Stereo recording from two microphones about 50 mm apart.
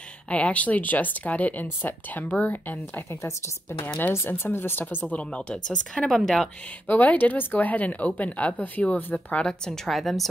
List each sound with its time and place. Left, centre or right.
0.3 s speech: left
4.3 s speech: left
5.1 s speech: left
6.0 s speech: centre
6.9 s speech: left
9.8 s speech: centre